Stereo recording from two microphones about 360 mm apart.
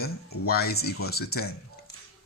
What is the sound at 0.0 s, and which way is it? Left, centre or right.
Speech, left.